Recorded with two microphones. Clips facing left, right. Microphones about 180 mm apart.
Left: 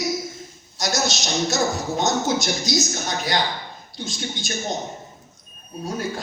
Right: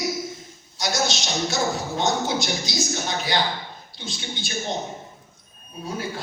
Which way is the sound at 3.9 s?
45° left (ahead or behind).